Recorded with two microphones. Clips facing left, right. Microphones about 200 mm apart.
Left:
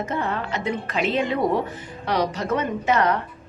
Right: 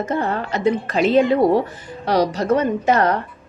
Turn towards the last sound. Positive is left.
turn(degrees=-40)  # may be behind; listen again after turning